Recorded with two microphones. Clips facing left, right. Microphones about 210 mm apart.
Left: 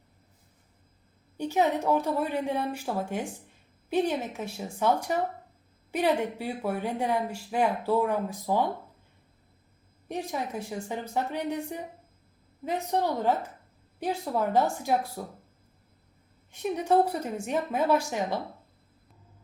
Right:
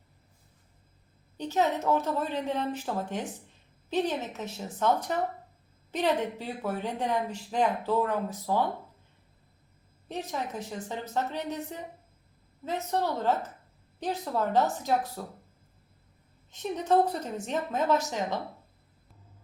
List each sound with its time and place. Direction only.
1.4 s speech: 10° left (ahead or behind)
10.1 s speech: 10° left (ahead or behind)
16.5 s speech: 10° left (ahead or behind)